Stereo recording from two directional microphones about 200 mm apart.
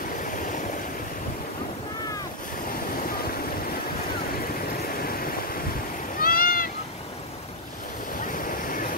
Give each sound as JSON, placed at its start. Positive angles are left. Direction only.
{"t": 5.0, "sound": "waves", "side_deg": 45}
{"t": 6.1, "sound": "a sound", "side_deg": 45}
{"t": 8.3, "sound": "waves", "side_deg": 45}